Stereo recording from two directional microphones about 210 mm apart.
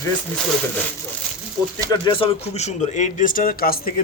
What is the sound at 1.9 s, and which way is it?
A man's voice, 25° left (ahead or behind).